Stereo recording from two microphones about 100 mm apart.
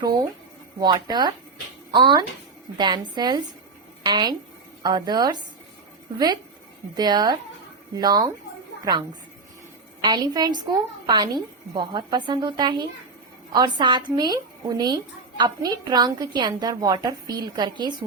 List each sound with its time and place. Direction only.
0.8 s a woman's voice: 45° right (ahead or behind)
10.0 s a woman's voice: 45° right (ahead or behind)